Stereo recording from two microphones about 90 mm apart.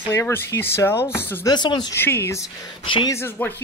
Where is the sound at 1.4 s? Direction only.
55° left (ahead or behind).